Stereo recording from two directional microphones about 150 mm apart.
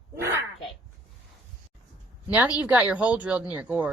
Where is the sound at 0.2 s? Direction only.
15° right (ahead or behind).